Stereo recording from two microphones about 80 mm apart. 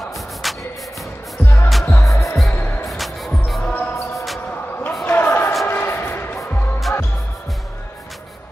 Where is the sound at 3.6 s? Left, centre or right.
Centre.